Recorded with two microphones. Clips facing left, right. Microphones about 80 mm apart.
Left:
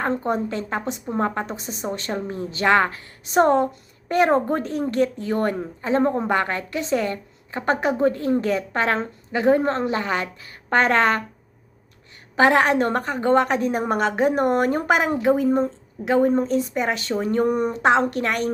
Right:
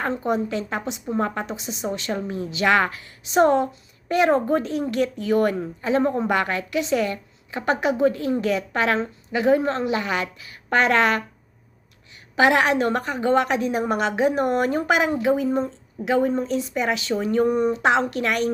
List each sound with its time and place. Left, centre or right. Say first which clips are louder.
0.3 s a woman's voice: even; left
12.4 s a woman's voice: left 1 dB; left